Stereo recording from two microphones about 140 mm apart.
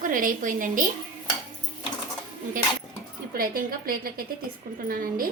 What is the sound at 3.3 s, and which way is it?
A woman's voice, 90° right.